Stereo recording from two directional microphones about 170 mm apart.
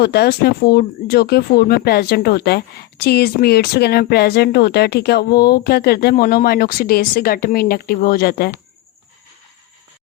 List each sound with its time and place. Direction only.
0.0 s speech: 70° left (ahead or behind)